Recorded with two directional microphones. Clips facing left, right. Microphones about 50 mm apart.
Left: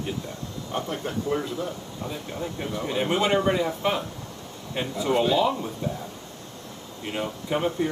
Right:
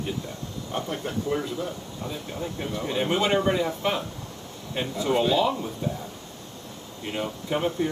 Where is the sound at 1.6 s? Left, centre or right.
Centre.